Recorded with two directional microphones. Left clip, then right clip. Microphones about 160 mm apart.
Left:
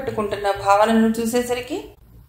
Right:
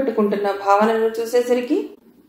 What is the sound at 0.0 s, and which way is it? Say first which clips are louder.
A woman's voice: right 3 dB; 40° left (ahead or behind).